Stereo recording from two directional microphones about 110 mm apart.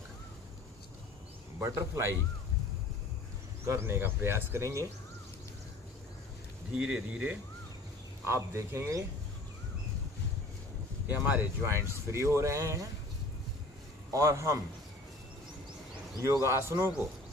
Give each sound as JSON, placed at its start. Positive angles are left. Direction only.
{"t": 1.5, "sound": "speech", "side_deg": -25}
{"t": 3.7, "sound": "speech", "side_deg": -25}
{"t": 6.7, "sound": "speech", "side_deg": -10}
{"t": 8.2, "sound": "speech", "side_deg": -25}
{"t": 11.1, "sound": "speech", "side_deg": -15}
{"t": 14.1, "sound": "speech", "side_deg": -30}
{"t": 16.2, "sound": "speech", "side_deg": -25}